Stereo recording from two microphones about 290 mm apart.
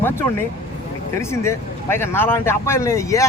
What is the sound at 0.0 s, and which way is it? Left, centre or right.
Speech, centre.